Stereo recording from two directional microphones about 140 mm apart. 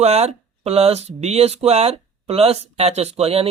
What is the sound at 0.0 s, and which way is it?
Speech, 50° right (ahead or behind).